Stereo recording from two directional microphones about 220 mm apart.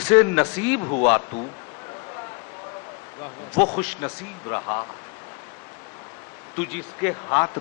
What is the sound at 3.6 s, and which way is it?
A man's voice, 25° left (ahead or behind).